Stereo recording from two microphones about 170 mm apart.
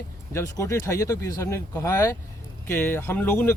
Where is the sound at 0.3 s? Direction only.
15° left (ahead or behind).